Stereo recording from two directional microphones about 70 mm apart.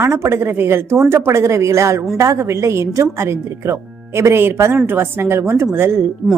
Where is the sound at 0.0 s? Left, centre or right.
Right.